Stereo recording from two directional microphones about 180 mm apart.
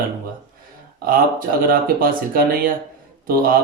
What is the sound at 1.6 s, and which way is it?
Speech, 55° right (ahead or behind).